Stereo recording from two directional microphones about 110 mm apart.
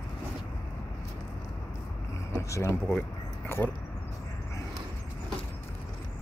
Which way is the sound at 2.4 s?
30° left (ahead or behind).